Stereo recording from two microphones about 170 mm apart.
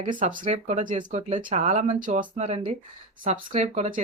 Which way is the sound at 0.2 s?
50° right (ahead or behind).